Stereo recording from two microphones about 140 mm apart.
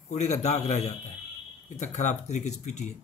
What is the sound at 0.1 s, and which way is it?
A man's voice, 55° left (ahead or behind).